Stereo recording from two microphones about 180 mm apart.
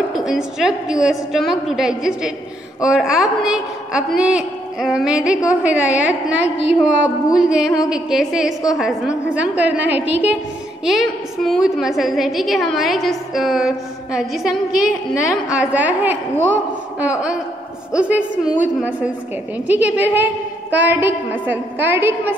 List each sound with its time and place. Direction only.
0.1 s a woman's voice: 5° right (ahead or behind)
19.7 s a woman's voice: 10° right (ahead or behind)